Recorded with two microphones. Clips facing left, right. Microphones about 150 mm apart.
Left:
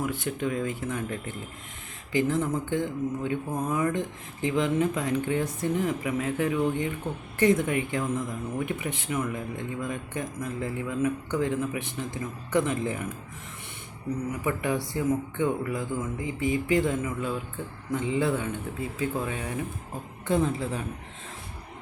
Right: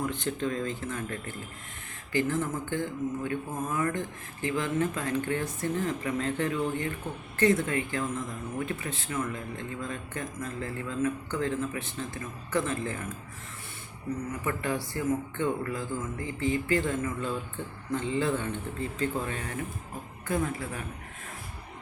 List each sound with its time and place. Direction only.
0.0 s speech: 10° left (ahead or behind)
14.4 s speech: 15° left (ahead or behind)
20.2 s a woman's voice: 25° left (ahead or behind)